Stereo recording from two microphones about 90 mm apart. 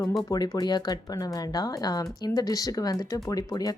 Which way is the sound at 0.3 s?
45° left (ahead or behind).